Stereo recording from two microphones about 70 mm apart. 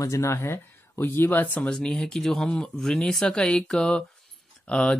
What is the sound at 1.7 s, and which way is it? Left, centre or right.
Speech, centre.